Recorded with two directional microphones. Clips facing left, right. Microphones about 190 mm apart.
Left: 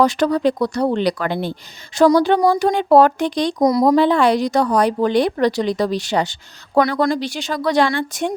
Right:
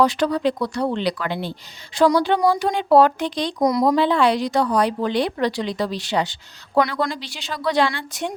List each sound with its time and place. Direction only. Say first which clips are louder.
0.0 s speech: left 3 dB; 45° left (ahead or behind)